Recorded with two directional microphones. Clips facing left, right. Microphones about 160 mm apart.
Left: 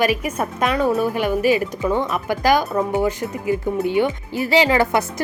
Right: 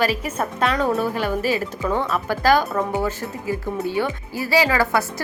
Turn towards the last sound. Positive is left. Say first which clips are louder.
# left 2 dB
turn(degrees=20)  # may be behind; listen again after turning